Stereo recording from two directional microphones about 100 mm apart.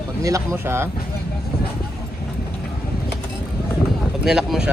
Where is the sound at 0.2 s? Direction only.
35° right (ahead or behind).